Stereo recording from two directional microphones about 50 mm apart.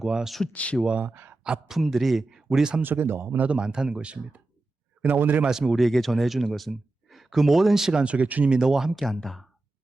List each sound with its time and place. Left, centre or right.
0.0 s speech: centre
0.5 s speech: left
1.0 s speech: right
1.6 s speech: centre
2.8 s speech: right
3.5 s speech: centre
5.0 s speech: right
5.5 s speech: centre
5.8 s speech: centre
8.0 s speech: right
8.4 s speech: centre